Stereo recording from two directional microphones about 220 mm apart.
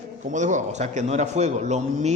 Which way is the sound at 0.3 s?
35° right (ahead or behind).